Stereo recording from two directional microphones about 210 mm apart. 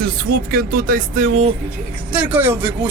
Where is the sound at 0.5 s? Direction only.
40° right (ahead or behind).